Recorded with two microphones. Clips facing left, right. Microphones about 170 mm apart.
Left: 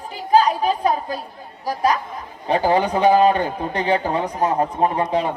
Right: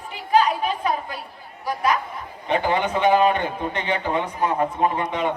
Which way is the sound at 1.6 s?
35° left (ahead or behind).